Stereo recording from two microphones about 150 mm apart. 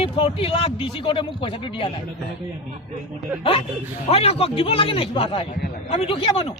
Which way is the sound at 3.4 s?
35° left (ahead or behind).